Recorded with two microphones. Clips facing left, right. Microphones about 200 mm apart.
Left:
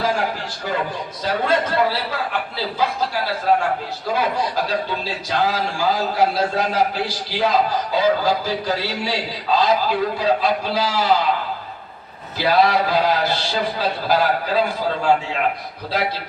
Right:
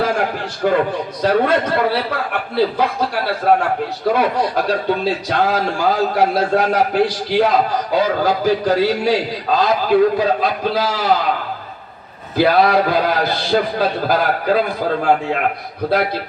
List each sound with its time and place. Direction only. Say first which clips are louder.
0.6 s a man's voice: right 9 dB; 55° right (ahead or behind)
12.4 s a man's voice: right 4 dB; 55° right (ahead or behind)